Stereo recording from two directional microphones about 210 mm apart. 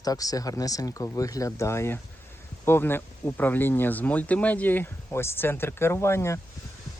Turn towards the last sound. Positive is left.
turn(degrees=10)  # may be behind; listen again after turning